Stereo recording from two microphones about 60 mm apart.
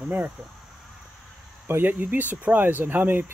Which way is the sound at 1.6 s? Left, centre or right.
Right.